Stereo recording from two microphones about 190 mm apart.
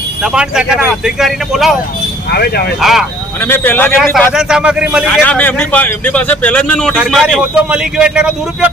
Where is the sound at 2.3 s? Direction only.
55° left (ahead or behind).